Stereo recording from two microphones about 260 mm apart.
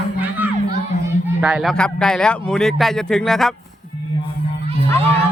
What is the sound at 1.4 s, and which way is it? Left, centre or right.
Speech, centre.